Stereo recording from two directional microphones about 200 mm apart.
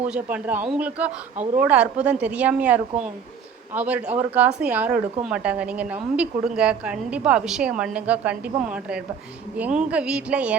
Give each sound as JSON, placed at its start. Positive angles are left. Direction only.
{"t": 0.1, "sound": "a woman's voice", "side_deg": -5}